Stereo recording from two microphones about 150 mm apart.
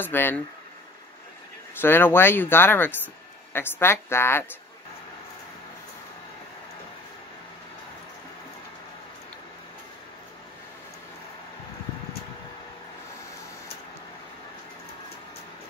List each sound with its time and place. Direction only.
0.0 s speech: 15° left (ahead or behind)
1.8 s speech: 15° left (ahead or behind)